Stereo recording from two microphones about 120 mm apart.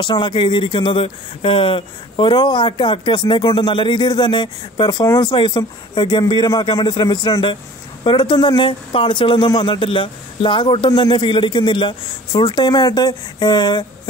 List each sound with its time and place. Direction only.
0.0 s speech: 40° left (ahead or behind)
5.0 s speech: 30° left (ahead or behind)
5.3 s speech: 40° left (ahead or behind)